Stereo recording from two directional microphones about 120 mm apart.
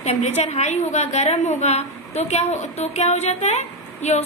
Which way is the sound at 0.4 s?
65° left (ahead or behind).